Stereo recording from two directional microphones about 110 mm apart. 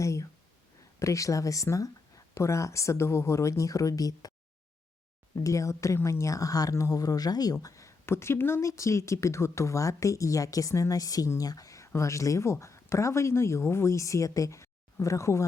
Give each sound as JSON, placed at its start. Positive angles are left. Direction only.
{"t": 0.0, "sound": "speech", "side_deg": 30}
{"t": 5.3, "sound": "speech", "side_deg": 30}